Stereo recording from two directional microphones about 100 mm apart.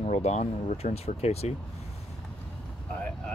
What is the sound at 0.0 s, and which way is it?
Speech, 90° left.